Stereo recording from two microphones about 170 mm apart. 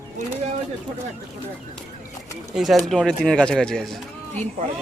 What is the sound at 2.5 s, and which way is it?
Speech, centre (ahead or behind).